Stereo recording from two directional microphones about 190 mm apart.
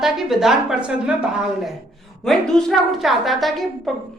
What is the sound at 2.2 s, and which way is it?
A woman's voice, centre (ahead or behind).